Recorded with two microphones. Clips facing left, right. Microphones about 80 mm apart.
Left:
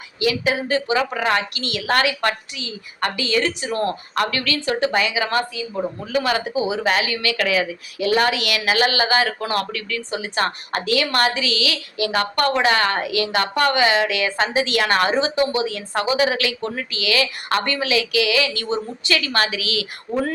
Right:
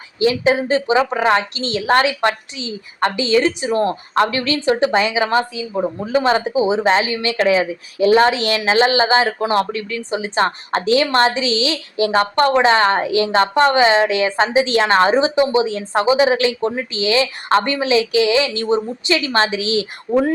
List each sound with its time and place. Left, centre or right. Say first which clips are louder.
0.2 s a woman's voice: right 5 dB; right
20.1 s speech: right 6 dB; centre